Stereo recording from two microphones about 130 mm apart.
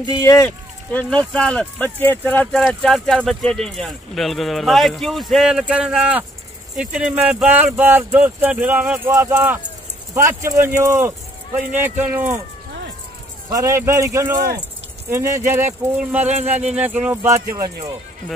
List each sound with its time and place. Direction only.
0.2 s speech: 20° left (ahead or behind)
0.9 s speech: 10° left (ahead or behind); by 12.4 s 15° right (ahead or behind)
13.5 s speech: 25° right (ahead or behind)